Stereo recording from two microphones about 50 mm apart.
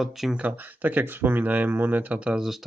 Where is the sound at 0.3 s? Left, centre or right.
Right.